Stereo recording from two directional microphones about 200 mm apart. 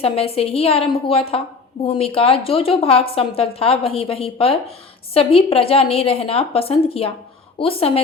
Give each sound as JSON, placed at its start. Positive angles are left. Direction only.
{"t": 0.0, "sound": "a woman's voice", "side_deg": 30}